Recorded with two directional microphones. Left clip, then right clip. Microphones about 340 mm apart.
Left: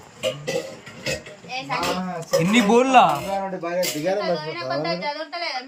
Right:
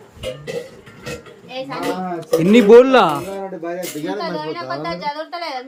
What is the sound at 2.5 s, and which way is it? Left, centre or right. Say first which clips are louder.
Speech: right 8 dB; centre.